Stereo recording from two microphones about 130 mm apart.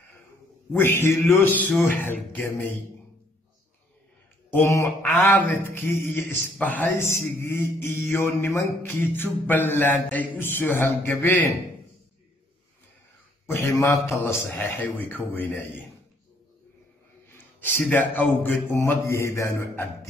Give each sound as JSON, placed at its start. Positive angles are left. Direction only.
{"t": 0.7, "sound": "a man's voice", "side_deg": 20}
{"t": 1.3, "sound": "mantra", "side_deg": 15}
{"t": 4.5, "sound": "mantra", "side_deg": 20}
{"t": 13.5, "sound": "a man's voice", "side_deg": 20}
{"t": 15.0, "sound": "mantra", "side_deg": 15}
{"t": 17.4, "sound": "a man's voice", "side_deg": 15}